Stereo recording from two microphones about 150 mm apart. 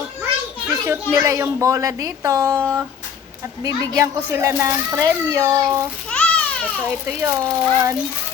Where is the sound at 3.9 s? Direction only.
20° right (ahead or behind).